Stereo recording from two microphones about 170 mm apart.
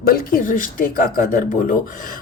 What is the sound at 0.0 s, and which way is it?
A woman's voice, 60° left (ahead or behind).